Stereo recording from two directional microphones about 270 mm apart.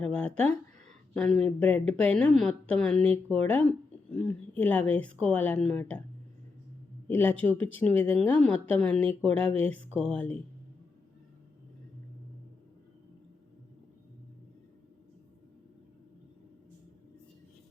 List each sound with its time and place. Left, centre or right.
0.0 s speech: centre
7.1 s speech: centre
9.2 s speech: right
9.5 s speech: centre